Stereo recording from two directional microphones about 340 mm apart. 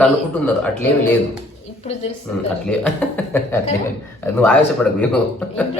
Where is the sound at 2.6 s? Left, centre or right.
Centre.